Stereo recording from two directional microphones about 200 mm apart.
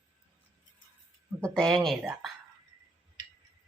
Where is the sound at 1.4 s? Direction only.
5° left (ahead or behind).